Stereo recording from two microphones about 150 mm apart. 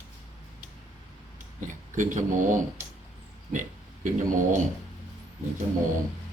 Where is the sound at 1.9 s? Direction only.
60° right (ahead or behind).